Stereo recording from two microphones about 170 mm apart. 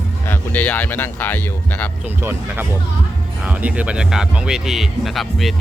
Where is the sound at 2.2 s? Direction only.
15° right (ahead or behind).